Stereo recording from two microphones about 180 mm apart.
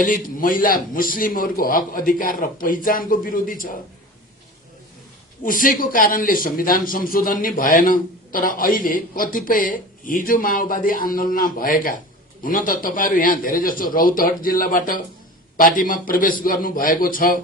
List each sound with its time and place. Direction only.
0.0 s a man's voice: 50° left (ahead or behind)
5.4 s a man's voice: 50° left (ahead or behind)